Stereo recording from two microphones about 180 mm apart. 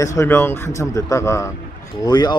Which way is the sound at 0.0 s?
15° left (ahead or behind).